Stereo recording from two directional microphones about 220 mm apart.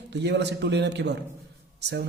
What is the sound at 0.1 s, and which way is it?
A man's voice, 50° right (ahead or behind).